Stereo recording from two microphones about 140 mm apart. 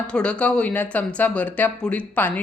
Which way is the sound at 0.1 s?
10° left (ahead or behind).